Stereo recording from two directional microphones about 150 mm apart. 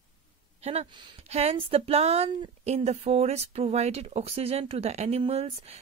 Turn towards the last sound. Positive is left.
turn(degrees=-45)  # may be behind; listen again after turning